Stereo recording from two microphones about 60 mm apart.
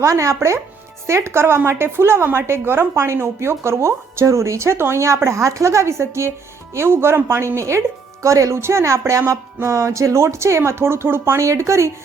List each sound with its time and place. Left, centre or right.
0.0 s a woman's voice: right
11.3 s speech: right